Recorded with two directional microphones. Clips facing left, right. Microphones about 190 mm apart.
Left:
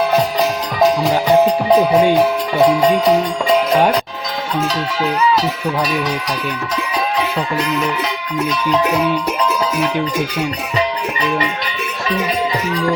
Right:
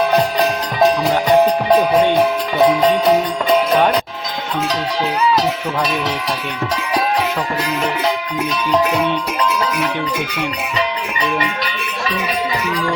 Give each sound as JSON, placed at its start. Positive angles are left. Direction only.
{"t": 0.1, "sound": "music", "side_deg": 0}
{"t": 10.2, "sound": "music", "side_deg": 45}